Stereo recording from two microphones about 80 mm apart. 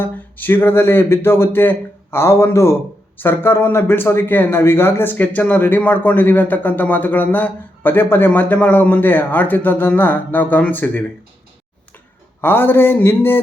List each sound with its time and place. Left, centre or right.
0.0 s a man's voice: left
12.4 s a man's voice: left